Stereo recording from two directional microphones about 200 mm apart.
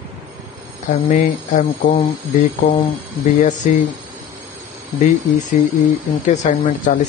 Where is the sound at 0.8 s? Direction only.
40° left (ahead or behind).